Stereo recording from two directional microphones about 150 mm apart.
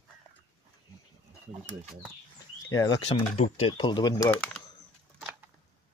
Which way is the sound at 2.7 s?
20° left (ahead or behind).